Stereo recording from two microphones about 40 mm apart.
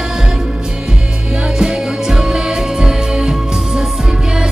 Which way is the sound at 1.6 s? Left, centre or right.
Centre.